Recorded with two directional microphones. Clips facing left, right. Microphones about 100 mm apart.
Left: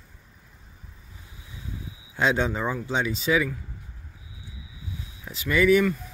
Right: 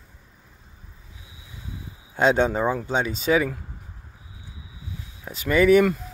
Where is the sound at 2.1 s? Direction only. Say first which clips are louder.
Right 5 dB; 45° right (ahead or behind).